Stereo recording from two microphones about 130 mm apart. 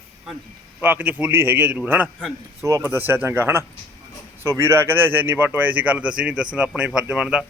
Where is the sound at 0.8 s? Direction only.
15° right (ahead or behind).